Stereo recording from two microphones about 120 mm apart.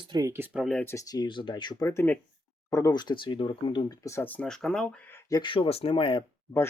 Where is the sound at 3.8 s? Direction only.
25° left (ahead or behind); by 4.9 s 5° left (ahead or behind).